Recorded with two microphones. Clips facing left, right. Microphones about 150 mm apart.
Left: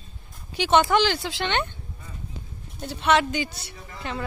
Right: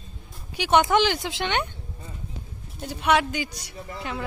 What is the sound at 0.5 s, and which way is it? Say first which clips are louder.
Speech: even; 10° right (ahead or behind).